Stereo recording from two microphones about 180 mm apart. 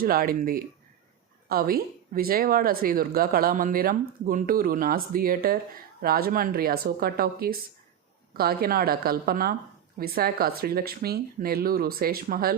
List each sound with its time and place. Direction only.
0.0 s speech: 55° right (ahead or behind)